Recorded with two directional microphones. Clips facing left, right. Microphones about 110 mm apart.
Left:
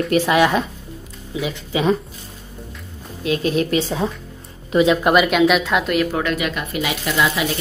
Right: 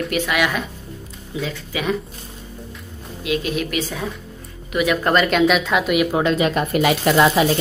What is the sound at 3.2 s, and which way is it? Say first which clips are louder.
A woman's voice: left 3 dB; 35° left (ahead or behind).